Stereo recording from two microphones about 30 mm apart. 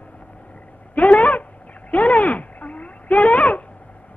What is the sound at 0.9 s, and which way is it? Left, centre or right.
Speech, left.